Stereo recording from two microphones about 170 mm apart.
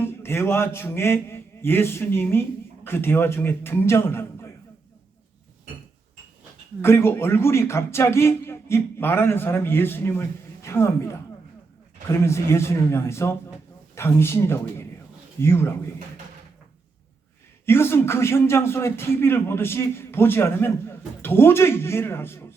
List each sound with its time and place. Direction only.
0.0 s a man's voice: 15° left (ahead or behind)
6.8 s a man's voice: 15° left (ahead or behind)
17.7 s a man's voice: 15° left (ahead or behind)